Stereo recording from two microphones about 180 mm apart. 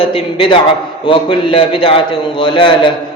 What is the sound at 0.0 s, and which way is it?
A man's voice, 30° left (ahead or behind).